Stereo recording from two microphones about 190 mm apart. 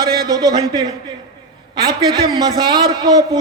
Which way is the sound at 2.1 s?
20° right (ahead or behind).